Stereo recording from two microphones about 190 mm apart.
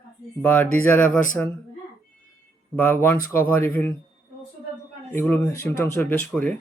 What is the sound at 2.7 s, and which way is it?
Speech, 10° left (ahead or behind).